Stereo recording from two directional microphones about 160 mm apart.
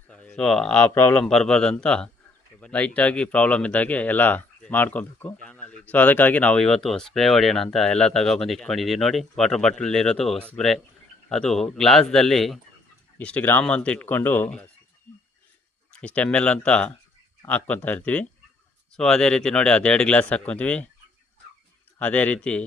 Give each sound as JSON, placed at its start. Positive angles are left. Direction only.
{"t": 0.1, "sound": "speech", "side_deg": 10}
{"t": 15.9, "sound": "speech", "side_deg": 5}
{"t": 21.9, "sound": "speech", "side_deg": 10}